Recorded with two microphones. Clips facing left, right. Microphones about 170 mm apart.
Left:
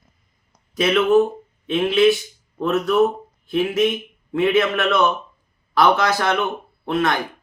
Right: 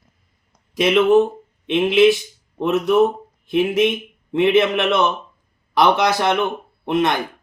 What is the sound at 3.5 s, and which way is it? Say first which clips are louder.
Speech: right 2 dB; 20° right (ahead or behind).